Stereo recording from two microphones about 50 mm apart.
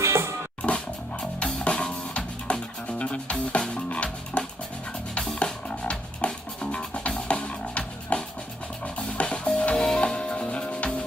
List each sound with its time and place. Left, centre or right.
0.0 s music: right
0.6 s music: left
5.6 s music: left